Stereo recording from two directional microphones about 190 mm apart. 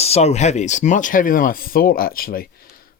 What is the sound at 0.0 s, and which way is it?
Speech, 35° left (ahead or behind).